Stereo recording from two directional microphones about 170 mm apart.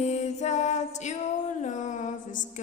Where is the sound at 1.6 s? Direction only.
45° left (ahead or behind).